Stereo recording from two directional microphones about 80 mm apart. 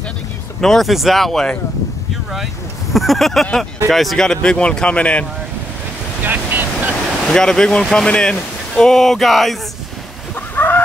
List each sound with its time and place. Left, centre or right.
0.6 s speech: centre
2.9 s speech: centre
6.2 s vehicle: right
7.2 s speech: centre
10.3 s fowl: left